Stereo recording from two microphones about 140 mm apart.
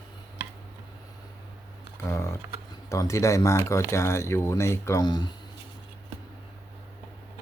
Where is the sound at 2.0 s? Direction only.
20° left (ahead or behind).